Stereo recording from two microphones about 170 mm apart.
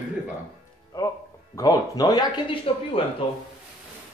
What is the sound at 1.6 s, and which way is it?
Speech, 20° left (ahead or behind).